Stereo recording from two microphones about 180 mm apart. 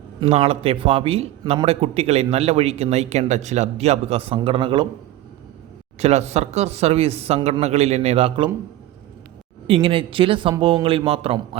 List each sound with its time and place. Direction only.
0.2 s a man's voice: 35° right (ahead or behind)
6.0 s a man's voice: 35° right (ahead or behind)
9.6 s a man's voice: 30° right (ahead or behind)